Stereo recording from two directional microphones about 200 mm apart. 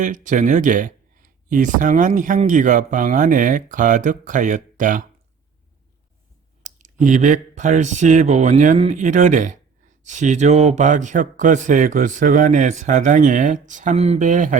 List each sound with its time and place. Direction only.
0.0 s speech: 40° right (ahead or behind)
6.6 s speech: 35° right (ahead or behind)